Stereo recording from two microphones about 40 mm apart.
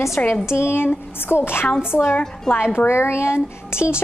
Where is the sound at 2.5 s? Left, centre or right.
Left.